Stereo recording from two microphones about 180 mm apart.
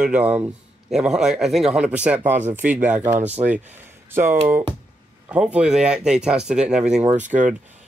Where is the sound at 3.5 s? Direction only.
10° right (ahead or behind).